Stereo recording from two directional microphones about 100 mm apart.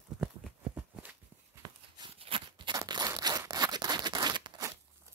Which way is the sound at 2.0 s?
70° right (ahead or behind).